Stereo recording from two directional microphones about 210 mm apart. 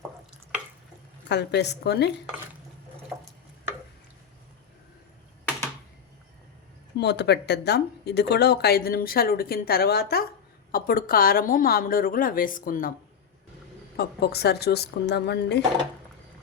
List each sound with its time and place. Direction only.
1.3 s speech: 55° left (ahead or behind)
6.9 s speech: 55° left (ahead or behind)
13.9 s speech: 50° left (ahead or behind)